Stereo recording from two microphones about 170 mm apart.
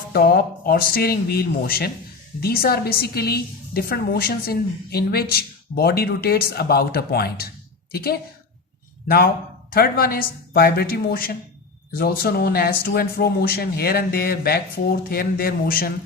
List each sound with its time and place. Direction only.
0.1 s a woman's voice: 60° left (ahead or behind)